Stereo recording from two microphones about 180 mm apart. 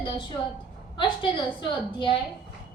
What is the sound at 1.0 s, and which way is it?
A woman's voice, 25° left (ahead or behind).